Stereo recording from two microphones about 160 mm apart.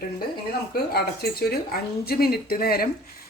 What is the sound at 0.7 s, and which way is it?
Speech, 75° left (ahead or behind).